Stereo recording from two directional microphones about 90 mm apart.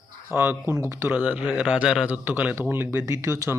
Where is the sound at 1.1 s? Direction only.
15° right (ahead or behind).